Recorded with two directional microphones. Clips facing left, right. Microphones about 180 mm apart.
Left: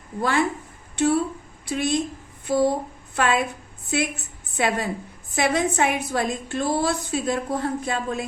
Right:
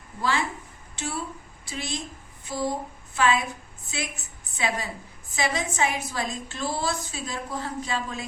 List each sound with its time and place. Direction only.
0.2 s a woman's voice: 55° left (ahead or behind)